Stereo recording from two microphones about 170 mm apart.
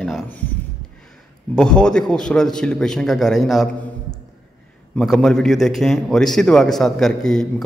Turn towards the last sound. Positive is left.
turn(degrees=5)  # may be behind; listen again after turning